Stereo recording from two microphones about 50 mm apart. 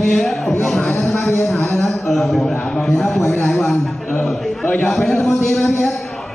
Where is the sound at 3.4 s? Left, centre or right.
Left.